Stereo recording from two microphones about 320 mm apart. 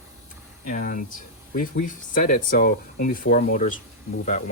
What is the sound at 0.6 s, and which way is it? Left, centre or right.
Speech, left.